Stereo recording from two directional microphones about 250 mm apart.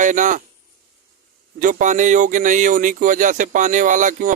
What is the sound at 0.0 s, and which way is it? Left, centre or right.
Speech, right.